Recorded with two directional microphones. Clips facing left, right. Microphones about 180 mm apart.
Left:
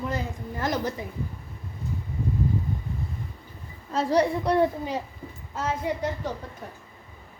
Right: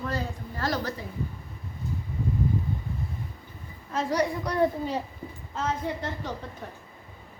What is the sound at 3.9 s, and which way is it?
Speech, 30° left (ahead or behind).